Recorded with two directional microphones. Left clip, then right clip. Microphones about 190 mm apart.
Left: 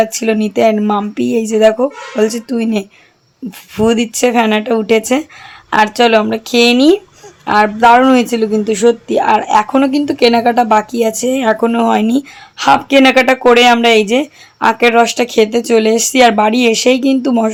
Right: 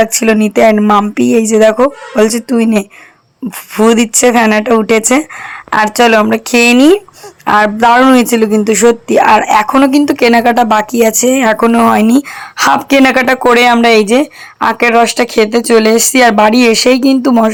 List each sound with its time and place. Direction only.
0.0 s speech: 20° right (ahead or behind)
3.9 s speech: 15° right (ahead or behind)